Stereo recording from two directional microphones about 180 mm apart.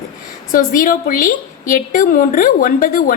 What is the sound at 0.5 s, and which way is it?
A woman's voice, 50° left (ahead or behind).